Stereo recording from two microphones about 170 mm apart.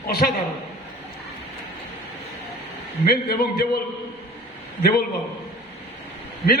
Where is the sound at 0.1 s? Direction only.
60° left (ahead or behind).